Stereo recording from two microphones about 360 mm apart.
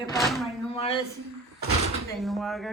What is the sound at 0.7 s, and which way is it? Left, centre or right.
Speech, centre.